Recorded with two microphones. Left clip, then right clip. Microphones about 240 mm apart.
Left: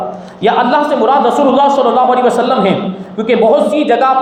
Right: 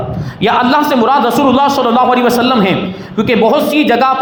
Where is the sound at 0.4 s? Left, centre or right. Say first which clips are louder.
Even; right.